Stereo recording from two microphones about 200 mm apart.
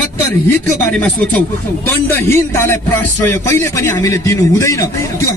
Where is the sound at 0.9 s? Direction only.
5° left (ahead or behind).